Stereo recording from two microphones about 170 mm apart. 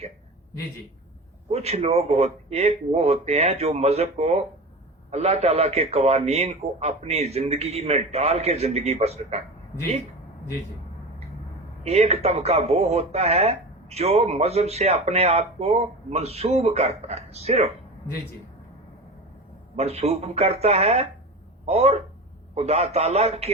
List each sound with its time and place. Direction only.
1.5 s speech: 40° right (ahead or behind)
11.8 s speech: 40° right (ahead or behind)
19.7 s speech: 40° right (ahead or behind)